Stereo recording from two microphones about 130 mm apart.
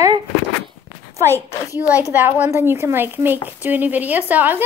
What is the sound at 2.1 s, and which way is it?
A woman's voice, 15° right (ahead or behind).